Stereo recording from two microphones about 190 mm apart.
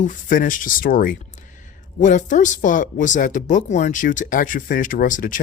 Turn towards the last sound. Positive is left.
turn(degrees=45)  # may be behind; listen again after turning